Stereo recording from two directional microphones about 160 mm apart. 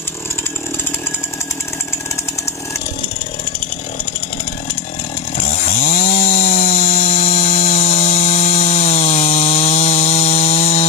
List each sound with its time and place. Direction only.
5.4 s chainsaw: 50° left (ahead or behind)